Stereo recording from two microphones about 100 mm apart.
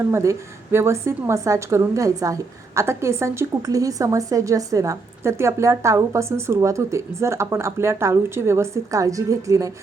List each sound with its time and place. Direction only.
0.1 s a woman's voice: 30° right (ahead or behind)